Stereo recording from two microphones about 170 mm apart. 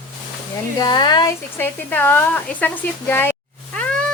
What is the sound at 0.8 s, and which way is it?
Speech, 25° left (ahead or behind).